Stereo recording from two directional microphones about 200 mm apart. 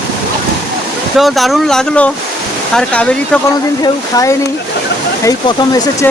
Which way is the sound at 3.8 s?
15° left (ahead or behind).